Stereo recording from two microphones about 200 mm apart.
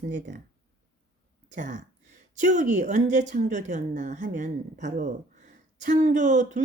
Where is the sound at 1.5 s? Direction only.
35° right (ahead or behind).